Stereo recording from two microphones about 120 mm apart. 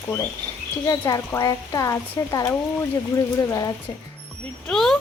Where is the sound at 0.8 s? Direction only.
30° left (ahead or behind).